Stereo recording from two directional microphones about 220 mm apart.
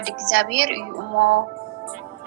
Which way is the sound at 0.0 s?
50° right (ahead or behind).